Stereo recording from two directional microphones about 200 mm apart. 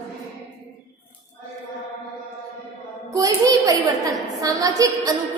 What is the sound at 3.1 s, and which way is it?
A woman's voice, 15° right (ahead or behind).